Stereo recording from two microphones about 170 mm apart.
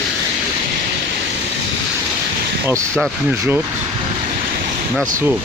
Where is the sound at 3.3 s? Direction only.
10° right (ahead or behind).